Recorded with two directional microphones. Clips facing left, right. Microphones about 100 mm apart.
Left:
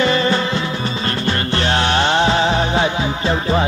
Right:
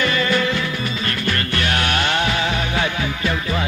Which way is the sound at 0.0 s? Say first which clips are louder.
Left 3 dB; 30° left (ahead or behind).